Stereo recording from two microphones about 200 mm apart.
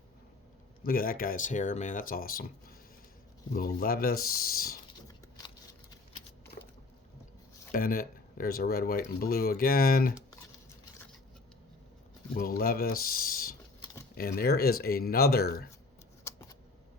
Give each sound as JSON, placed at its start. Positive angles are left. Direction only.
{"t": 0.9, "sound": "speech", "side_deg": 45}
{"t": 7.7, "sound": "speech", "side_deg": 45}
{"t": 12.4, "sound": "speech", "side_deg": 50}
{"t": 16.3, "sound": "a sound", "side_deg": 15}